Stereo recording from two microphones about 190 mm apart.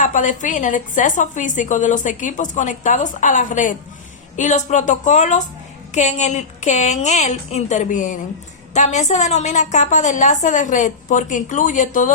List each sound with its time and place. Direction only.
0.0 s a woman's voice: 45° left (ahead or behind)